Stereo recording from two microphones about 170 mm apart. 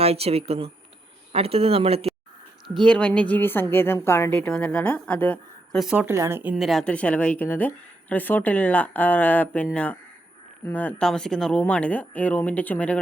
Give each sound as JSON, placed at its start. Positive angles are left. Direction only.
{"t": 0.0, "sound": "speech", "side_deg": -35}
{"t": 2.6, "sound": "speech", "side_deg": 0}